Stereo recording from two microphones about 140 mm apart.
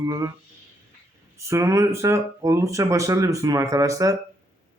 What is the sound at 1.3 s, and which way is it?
Speech, 20° right (ahead or behind).